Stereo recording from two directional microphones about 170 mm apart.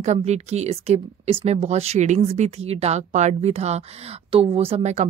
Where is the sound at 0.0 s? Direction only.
40° right (ahead or behind).